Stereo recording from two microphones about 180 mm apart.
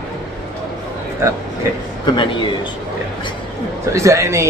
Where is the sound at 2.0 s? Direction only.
25° left (ahead or behind).